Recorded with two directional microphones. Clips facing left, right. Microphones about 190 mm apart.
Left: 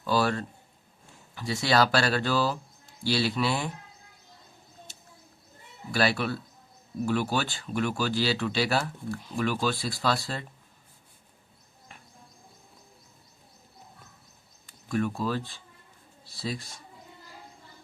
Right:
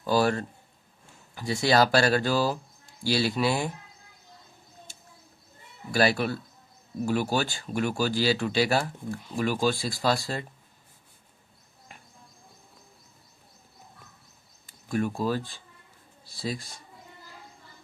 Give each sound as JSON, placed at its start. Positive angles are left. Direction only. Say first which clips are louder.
{"t": 0.0, "sound": "a sound", "louder": "right 2 dB", "side_deg": -45}
{"t": 1.4, "sound": "speech", "louder": "right 2 dB", "side_deg": -45}
{"t": 5.9, "sound": "speech", "louder": "right 2 dB", "side_deg": -45}
{"t": 14.9, "sound": "speech", "louder": "right 1 dB", "side_deg": -40}